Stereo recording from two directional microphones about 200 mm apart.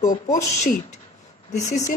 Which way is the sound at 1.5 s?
35° left (ahead or behind).